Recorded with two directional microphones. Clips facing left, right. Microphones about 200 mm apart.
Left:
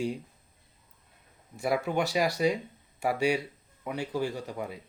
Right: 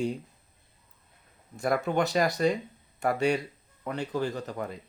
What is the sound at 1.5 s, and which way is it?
A man's voice, 5° left (ahead or behind).